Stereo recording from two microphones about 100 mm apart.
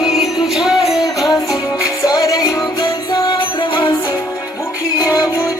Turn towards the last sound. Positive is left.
turn(degrees=30)  # may be behind; listen again after turning